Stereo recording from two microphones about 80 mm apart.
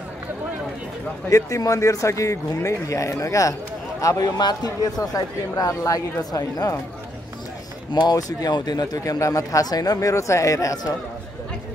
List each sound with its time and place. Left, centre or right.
1.3 s a man's voice: left
4.4 s a man's voice: left
7.9 s a man's voice: left